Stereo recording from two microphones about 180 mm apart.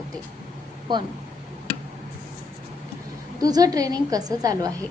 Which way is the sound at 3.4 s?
20° right (ahead or behind).